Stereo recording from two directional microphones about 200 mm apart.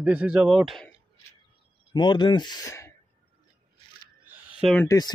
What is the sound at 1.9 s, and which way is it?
Speech, 20° left (ahead or behind).